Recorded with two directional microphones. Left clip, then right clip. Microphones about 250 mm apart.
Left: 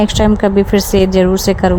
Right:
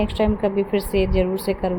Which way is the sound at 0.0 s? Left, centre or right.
Left.